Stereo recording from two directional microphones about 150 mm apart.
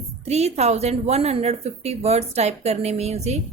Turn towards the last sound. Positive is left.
turn(degrees=-45)  # may be behind; listen again after turning